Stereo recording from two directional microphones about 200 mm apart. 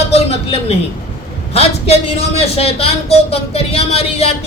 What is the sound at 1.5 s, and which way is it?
A man's voice, 30° left (ahead or behind).